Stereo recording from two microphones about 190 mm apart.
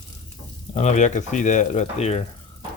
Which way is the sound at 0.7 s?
35° left (ahead or behind).